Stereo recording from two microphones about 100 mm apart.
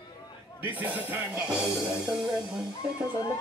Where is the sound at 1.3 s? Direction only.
5° right (ahead or behind).